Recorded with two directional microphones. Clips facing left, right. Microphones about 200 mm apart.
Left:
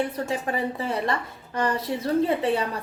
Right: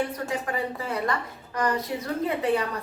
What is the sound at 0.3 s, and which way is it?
A woman's voice, 25° left (ahead or behind).